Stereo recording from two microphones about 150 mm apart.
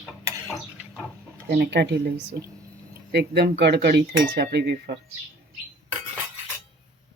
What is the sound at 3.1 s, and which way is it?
Speech, 90° right.